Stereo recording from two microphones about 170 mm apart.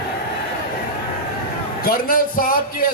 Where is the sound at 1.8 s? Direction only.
60° left (ahead or behind).